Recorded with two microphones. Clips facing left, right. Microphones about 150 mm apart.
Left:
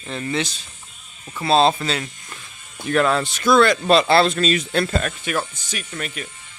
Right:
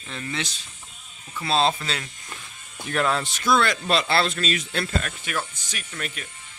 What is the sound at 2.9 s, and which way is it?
Speech, 90° left.